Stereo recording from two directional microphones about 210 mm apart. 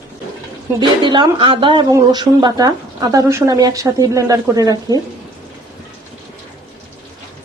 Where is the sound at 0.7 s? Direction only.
20° right (ahead or behind).